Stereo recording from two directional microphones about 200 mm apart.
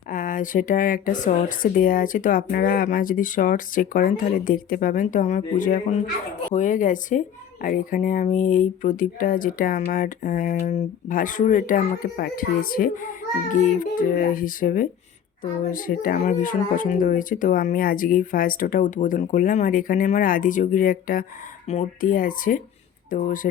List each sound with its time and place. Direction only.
0.1 s speech: 40° left (ahead or behind)